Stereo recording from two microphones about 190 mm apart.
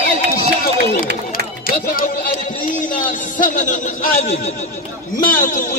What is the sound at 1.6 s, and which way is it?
Music, 50° left (ahead or behind).